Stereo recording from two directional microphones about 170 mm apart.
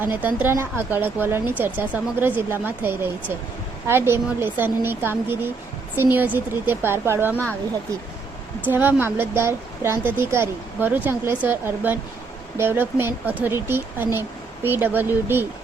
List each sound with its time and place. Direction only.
0.0 s speech: 10° right (ahead or behind)
8.6 s speech: 10° right (ahead or behind)